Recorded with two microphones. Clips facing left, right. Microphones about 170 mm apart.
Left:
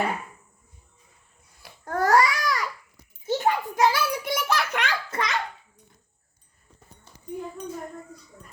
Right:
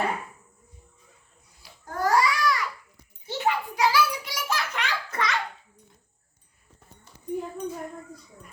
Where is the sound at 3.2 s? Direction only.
45° left (ahead or behind); by 4.9 s 65° left (ahead or behind).